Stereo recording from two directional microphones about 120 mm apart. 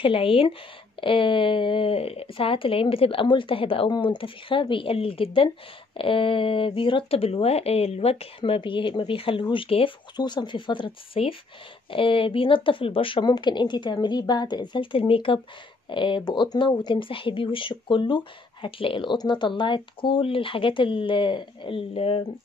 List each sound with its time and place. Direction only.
0.0 s speech: 50° left (ahead or behind)
10.1 s speech: 40° left (ahead or behind)